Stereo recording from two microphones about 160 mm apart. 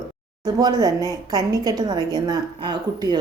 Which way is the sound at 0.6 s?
25° right (ahead or behind).